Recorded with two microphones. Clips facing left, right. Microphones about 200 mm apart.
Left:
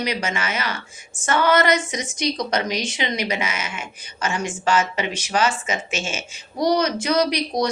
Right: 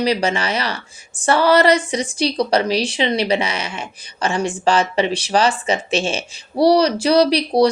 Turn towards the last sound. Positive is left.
turn(degrees=-30)  # may be behind; listen again after turning